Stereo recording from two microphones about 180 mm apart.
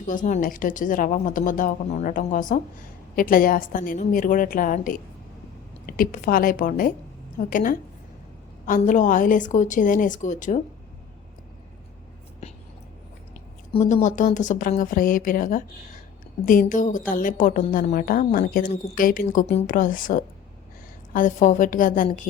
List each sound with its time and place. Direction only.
0.0 s a woman's voice: 45° left (ahead or behind)
13.7 s a woman's voice: 35° left (ahead or behind)